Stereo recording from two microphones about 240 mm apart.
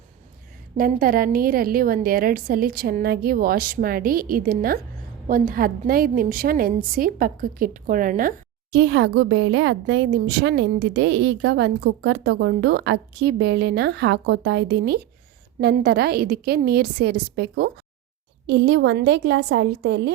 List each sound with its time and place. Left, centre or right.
0.8 s a woman's voice: right
8.7 s a woman's voice: right